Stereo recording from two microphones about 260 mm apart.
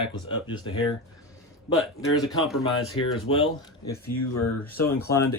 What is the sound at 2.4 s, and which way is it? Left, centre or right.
Speech, centre.